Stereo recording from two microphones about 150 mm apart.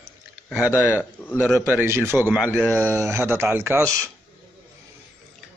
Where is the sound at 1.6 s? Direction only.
15° right (ahead or behind).